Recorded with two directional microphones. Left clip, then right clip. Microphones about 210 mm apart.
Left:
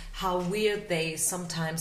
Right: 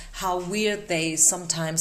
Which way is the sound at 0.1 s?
45° right (ahead or behind).